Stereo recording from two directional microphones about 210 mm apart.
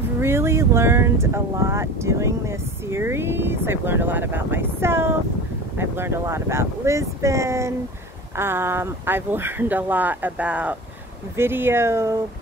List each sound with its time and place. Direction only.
0.2 s speech: 10° right (ahead or behind)